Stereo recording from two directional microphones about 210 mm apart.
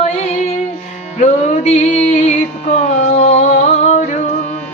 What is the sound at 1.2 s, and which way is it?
Music, 35° left (ahead or behind).